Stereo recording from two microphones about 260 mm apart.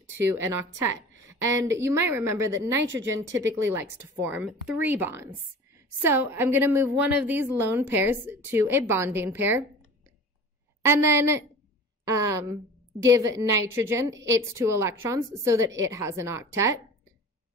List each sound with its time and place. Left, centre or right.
0.1 s a woman's voice: centre
1.2 s a sound: centre
1.8 s a woman's voice: centre
10.8 s a woman's voice: centre